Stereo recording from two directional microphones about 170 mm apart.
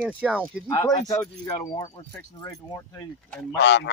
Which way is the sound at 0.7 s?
20° left (ahead or behind).